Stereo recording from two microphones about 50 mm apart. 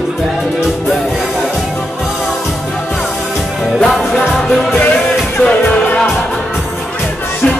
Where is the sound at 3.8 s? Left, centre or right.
Centre.